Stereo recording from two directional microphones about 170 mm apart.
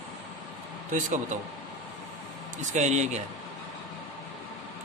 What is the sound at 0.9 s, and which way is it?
Speech, 45° right (ahead or behind).